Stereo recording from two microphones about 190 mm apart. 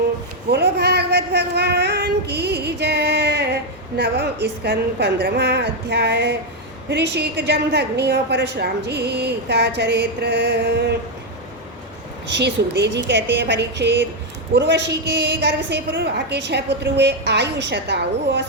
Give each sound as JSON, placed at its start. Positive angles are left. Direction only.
{"t": 0.5, "sound": "a woman's voice", "side_deg": -60}
{"t": 12.3, "sound": "a woman's voice", "side_deg": -65}